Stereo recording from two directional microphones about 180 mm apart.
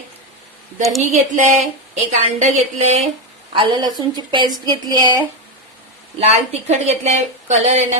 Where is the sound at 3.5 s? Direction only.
25° right (ahead or behind).